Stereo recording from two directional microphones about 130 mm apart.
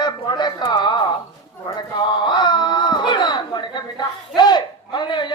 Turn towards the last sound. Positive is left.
turn(degrees=35)  # may be behind; listen again after turning